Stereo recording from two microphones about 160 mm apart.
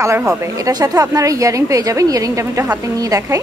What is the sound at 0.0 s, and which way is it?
A woman's voice, 15° right (ahead or behind).